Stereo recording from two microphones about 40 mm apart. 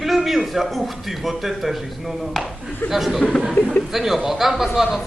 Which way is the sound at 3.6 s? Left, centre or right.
Left.